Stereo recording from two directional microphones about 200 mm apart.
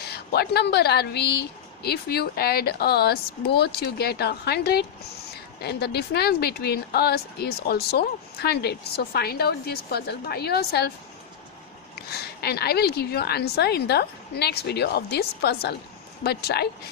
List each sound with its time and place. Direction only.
0.1 s speech: 55° left (ahead or behind)
11.9 s speech: 55° left (ahead or behind)